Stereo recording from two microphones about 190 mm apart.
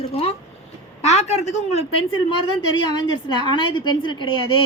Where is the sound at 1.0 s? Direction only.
35° left (ahead or behind).